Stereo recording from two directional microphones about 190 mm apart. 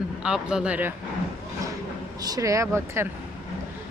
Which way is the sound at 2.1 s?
20° right (ahead or behind).